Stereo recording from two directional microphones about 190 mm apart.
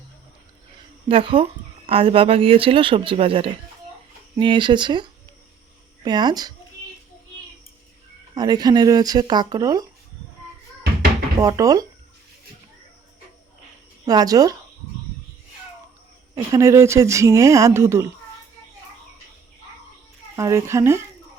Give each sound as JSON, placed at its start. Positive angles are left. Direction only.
{"t": 1.0, "sound": "speech", "side_deg": -25}
{"t": 8.4, "sound": "speech", "side_deg": -20}
{"t": 11.3, "sound": "speech", "side_deg": -15}
{"t": 14.0, "sound": "speech", "side_deg": -20}
{"t": 16.5, "sound": "speech", "side_deg": -15}
{"t": 20.3, "sound": "speech", "side_deg": -15}